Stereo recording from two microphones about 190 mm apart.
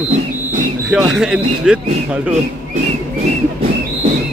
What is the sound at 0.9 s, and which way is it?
Speech, centre (ahead or behind).